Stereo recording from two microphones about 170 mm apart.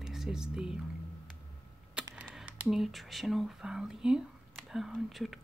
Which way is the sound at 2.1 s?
5° right (ahead or behind).